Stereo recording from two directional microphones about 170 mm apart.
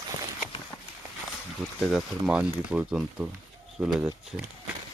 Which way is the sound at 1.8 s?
Centre (ahead or behind).